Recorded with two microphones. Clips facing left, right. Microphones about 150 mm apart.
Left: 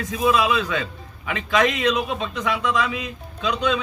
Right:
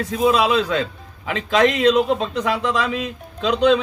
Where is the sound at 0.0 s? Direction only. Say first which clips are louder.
Right 3 dB; 30° right (ahead or behind).